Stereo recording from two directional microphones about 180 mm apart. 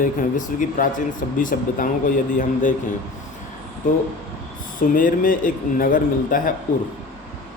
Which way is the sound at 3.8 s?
45° left (ahead or behind).